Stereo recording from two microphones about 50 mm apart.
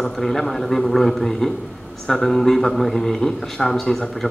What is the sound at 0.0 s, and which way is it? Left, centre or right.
A man's voice, centre.